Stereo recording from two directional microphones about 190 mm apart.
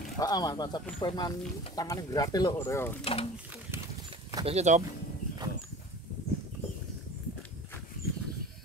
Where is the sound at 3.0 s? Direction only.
30° left (ahead or behind).